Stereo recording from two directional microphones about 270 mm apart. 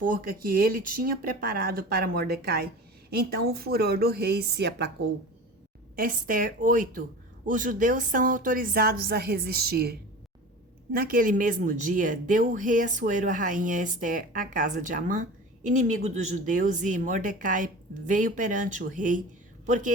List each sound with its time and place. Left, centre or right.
0.0 s a woman's voice: right
6.0 s a woman's voice: right